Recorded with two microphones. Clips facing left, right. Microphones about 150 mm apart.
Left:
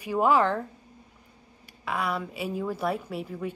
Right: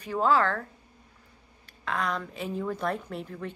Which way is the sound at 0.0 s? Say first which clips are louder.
Left 2 dB; 10° left (ahead or behind).